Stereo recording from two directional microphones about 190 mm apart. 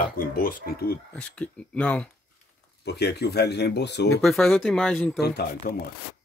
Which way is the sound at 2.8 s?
60° left (ahead or behind).